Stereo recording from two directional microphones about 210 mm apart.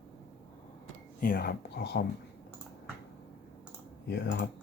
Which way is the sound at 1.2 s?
45° left (ahead or behind).